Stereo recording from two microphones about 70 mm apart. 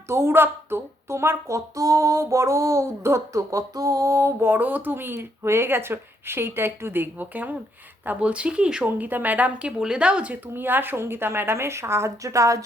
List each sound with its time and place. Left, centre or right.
0.1 s speech: right; by 8.9 s centre
8.9 s speech: right
10.5 s speech: right